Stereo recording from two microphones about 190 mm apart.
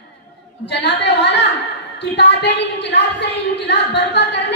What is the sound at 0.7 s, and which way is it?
A woman's voice, 65° left (ahead or behind).